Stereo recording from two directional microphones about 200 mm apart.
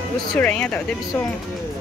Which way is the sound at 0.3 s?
5° left (ahead or behind).